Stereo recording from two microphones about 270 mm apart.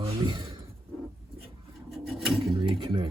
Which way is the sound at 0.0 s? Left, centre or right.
Centre.